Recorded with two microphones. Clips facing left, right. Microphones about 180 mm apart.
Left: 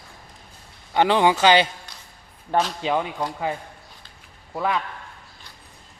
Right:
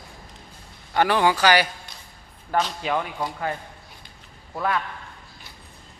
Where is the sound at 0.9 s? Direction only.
20° left (ahead or behind).